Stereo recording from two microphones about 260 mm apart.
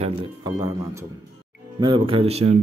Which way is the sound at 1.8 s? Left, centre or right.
Centre.